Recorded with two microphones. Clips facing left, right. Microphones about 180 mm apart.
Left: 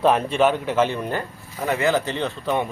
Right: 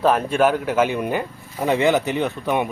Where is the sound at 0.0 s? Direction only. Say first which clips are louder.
Right 1 dB; 5° right (ahead or behind).